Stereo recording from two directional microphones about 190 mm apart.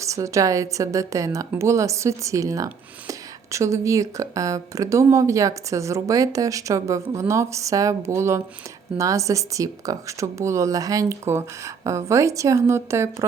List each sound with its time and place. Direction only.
0.0 s speech: 15° right (ahead or behind)